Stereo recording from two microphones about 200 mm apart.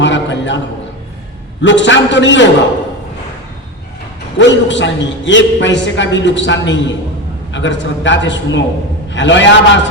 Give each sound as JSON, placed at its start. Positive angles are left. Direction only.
{"t": 0.0, "sound": "a sound", "side_deg": 65}
{"t": 1.6, "sound": "a man's voice", "side_deg": 65}
{"t": 4.4, "sound": "a man's voice", "side_deg": 65}